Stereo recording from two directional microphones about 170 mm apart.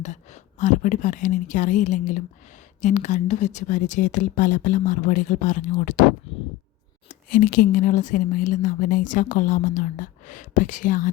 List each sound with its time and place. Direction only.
0.6 s speech: 45° left (ahead or behind)
7.1 s speech: 55° left (ahead or behind)